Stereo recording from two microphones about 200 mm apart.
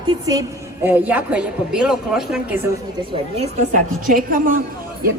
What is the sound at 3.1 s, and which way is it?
Speech, 30° right (ahead or behind).